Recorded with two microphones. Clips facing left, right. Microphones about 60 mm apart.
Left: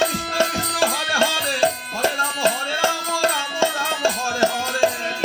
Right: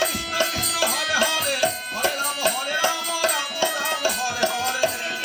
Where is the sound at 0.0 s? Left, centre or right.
Left.